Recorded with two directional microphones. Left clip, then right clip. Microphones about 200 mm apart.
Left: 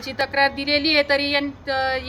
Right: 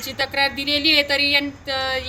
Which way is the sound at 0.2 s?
Centre (ahead or behind).